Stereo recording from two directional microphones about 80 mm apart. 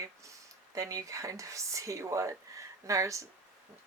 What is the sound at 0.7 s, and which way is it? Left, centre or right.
Speech, right.